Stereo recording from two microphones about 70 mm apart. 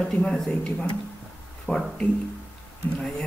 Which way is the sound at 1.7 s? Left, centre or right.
Centre.